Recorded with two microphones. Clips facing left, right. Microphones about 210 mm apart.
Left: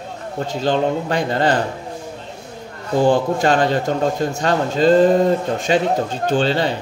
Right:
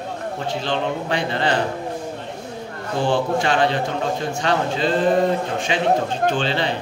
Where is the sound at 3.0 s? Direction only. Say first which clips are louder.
Left 4 dB; 40° left (ahead or behind).